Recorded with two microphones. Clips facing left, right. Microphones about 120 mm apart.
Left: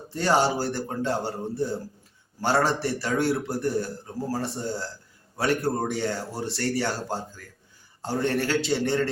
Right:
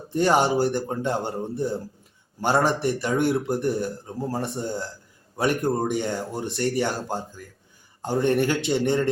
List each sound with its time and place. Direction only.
0.1 s a man's voice: 15° right (ahead or behind)